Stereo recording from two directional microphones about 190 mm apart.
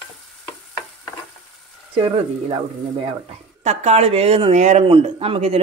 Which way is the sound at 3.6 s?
35° right (ahead or behind).